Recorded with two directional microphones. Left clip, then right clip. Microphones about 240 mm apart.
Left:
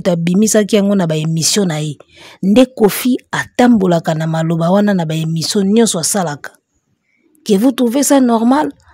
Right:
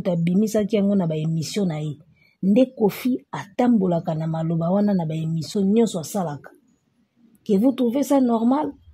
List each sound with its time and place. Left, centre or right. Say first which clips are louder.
0.0 s speech: left 9 dB; left